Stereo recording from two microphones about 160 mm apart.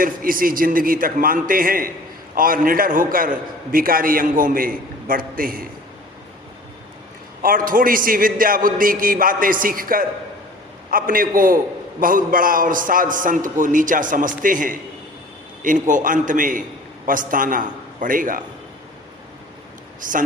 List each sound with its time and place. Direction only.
0.0 s a man's voice: 60° right (ahead or behind)
7.4 s a man's voice: 60° right (ahead or behind)
20.0 s a man's voice: 55° right (ahead or behind)